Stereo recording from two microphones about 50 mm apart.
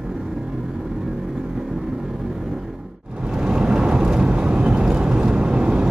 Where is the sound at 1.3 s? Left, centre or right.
Centre.